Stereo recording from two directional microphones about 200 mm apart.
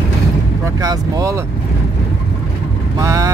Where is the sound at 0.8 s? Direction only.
15° right (ahead or behind).